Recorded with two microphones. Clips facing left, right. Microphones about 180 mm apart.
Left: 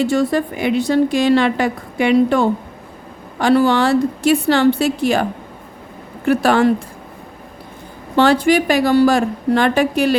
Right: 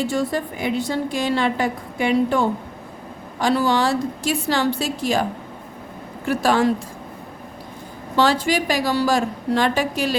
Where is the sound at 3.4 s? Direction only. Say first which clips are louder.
Left 5 dB; 65° left (ahead or behind).